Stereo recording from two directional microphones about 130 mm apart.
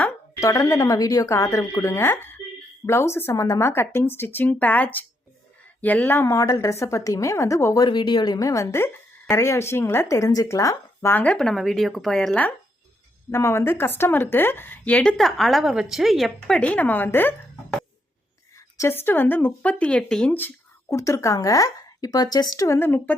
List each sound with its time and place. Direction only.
0.4 s a woman's voice: 25° left (ahead or behind)
7.9 s a woman's voice: 35° left (ahead or behind); by 12.5 s 10° left (ahead or behind)
13.3 s a woman's voice: 20° left (ahead or behind)
20.9 s speech: 25° left (ahead or behind)